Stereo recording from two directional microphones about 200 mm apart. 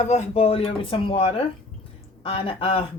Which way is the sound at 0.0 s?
30° left (ahead or behind).